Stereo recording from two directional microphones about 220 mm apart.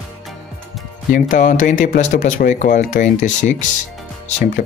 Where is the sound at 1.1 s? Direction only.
35° left (ahead or behind).